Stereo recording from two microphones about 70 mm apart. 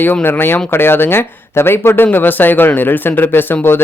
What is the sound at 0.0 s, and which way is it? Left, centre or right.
Speech, left.